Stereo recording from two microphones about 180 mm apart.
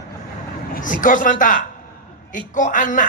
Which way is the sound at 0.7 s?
45° left (ahead or behind).